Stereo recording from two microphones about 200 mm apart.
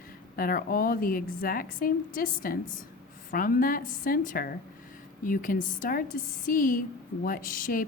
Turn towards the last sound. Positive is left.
turn(degrees=45)  # may be behind; listen again after turning